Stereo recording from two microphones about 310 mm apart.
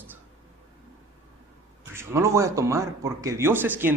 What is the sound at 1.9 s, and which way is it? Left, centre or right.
A man's voice, centre.